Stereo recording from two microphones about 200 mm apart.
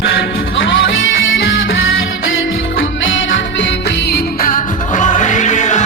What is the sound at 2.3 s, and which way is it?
Music, 75° left (ahead or behind).